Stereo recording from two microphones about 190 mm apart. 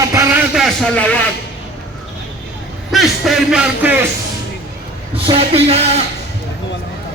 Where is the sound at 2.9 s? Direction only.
Centre (ahead or behind).